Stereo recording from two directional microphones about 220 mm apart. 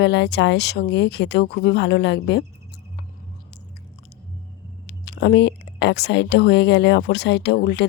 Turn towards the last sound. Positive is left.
turn(degrees=50)  # may be behind; listen again after turning